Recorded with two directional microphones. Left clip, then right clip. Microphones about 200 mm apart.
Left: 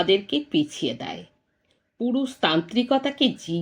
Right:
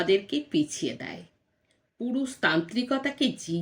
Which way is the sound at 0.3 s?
5° right (ahead or behind).